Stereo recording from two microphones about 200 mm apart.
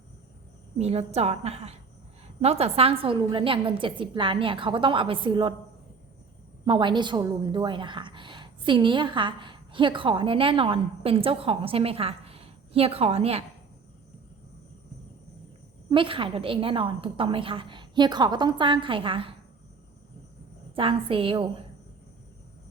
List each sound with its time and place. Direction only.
0.8 s a woman's voice: 30° right (ahead or behind)
6.7 s a woman's voice: 25° right (ahead or behind)
15.9 s a woman's voice: 25° right (ahead or behind)
20.7 s a woman's voice: 25° right (ahead or behind)